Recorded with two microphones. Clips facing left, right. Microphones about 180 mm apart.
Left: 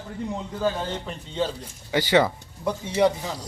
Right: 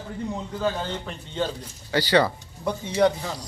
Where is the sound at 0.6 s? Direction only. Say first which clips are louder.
Left 1 dB; centre (ahead or behind).